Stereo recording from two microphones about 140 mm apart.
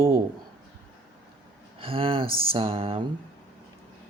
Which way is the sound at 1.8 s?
40° right (ahead or behind).